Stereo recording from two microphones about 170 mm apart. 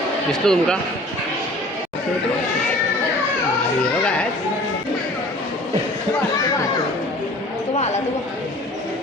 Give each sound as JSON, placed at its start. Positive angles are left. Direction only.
{"t": 0.3, "sound": "speech", "side_deg": 5}
{"t": 4.0, "sound": "music", "side_deg": 5}